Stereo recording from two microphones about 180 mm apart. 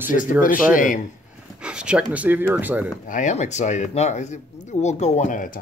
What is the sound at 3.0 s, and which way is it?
Speech, 45° left (ahead or behind).